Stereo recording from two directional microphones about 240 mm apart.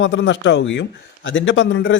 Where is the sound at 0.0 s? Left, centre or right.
Left.